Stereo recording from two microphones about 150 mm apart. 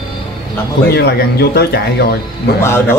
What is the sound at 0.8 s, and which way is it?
Speech, 90° left.